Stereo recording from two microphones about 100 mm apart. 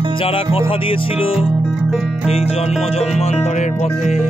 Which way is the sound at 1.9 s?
5° right (ahead or behind).